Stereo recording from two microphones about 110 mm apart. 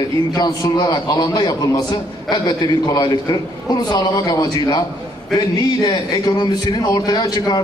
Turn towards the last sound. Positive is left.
turn(degrees=40)  # may be behind; listen again after turning